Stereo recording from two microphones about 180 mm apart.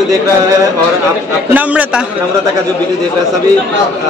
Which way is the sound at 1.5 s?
10° right (ahead or behind).